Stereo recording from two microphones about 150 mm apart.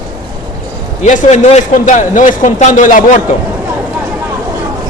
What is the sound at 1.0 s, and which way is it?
A man's voice, 50° left (ahead or behind).